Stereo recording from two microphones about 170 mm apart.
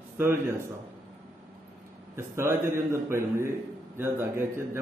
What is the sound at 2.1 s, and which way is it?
A man's voice, 15° right (ahead or behind).